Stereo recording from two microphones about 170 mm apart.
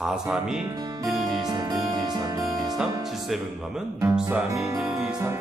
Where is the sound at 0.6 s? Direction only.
25° right (ahead or behind).